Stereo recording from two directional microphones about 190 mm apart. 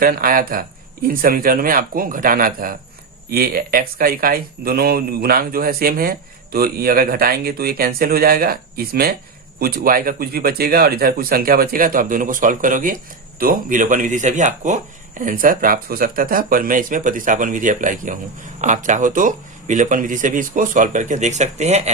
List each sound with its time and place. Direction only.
0.0 s speech: 50° right (ahead or behind)